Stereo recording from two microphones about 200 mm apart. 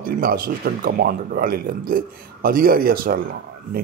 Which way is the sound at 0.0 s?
45° right (ahead or behind).